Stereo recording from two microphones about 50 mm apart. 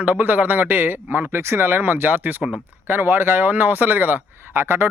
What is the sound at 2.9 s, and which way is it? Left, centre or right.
Speech, right.